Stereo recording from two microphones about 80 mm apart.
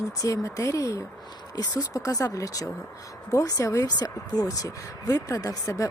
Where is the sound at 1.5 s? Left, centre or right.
Left.